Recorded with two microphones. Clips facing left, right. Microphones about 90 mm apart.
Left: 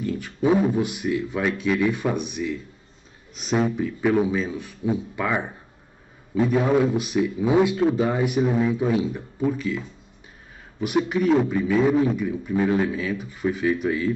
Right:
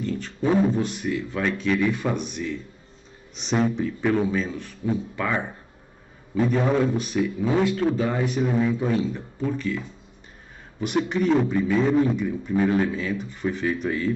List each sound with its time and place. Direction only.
0.0 s a man's voice: 10° left (ahead or behind)